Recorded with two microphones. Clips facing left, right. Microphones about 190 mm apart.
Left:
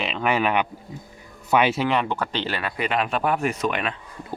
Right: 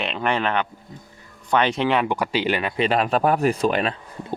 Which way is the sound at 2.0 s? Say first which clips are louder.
Right 4 dB; 10° right (ahead or behind).